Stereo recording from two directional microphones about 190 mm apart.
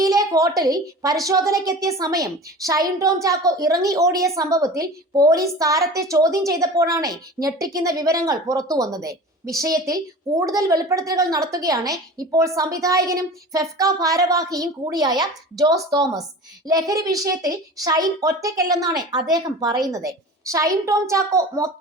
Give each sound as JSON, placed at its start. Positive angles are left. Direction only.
{"t": 0.0, "sound": "a woman's voice", "side_deg": -20}